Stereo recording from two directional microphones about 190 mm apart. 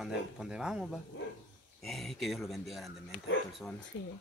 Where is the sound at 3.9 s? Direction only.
90° left.